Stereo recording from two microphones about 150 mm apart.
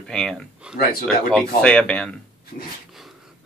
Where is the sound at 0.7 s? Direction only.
5° right (ahead or behind).